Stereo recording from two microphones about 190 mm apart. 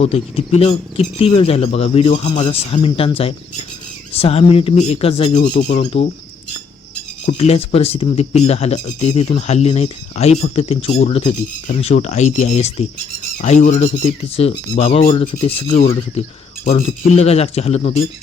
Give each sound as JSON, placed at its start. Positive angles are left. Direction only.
{"t": 0.0, "sound": "speech", "side_deg": 30}
{"t": 7.3, "sound": "speech", "side_deg": 35}